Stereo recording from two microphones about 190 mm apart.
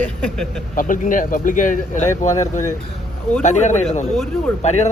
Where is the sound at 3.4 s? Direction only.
40° left (ahead or behind).